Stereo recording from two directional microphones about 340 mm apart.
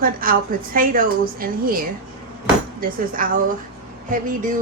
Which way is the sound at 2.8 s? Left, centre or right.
Right.